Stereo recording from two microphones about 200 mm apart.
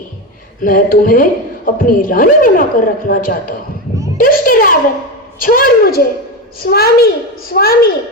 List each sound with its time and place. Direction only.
0.6 s a woman's voice: 45° left (ahead or behind)
4.2 s a sound: 45° left (ahead or behind)
5.4 s a woman's voice: 45° left (ahead or behind)